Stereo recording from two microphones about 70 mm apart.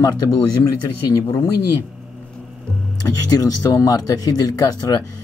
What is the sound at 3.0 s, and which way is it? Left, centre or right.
Speech, left.